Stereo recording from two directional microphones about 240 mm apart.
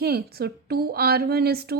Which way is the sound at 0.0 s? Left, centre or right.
Right.